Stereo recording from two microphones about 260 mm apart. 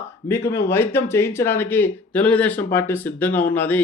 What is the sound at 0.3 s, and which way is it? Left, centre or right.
Speech, centre.